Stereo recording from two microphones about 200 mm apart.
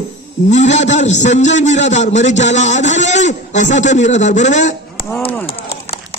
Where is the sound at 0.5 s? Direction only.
35° left (ahead or behind).